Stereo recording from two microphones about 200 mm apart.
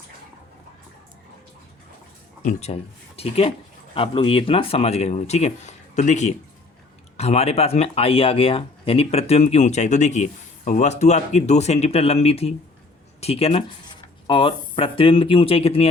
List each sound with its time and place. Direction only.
2.4 s speech: 35° left (ahead or behind)